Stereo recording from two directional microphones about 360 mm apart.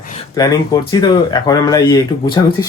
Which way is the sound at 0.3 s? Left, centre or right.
Centre.